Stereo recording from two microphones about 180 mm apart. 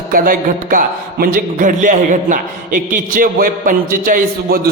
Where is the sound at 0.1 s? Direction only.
50° right (ahead or behind).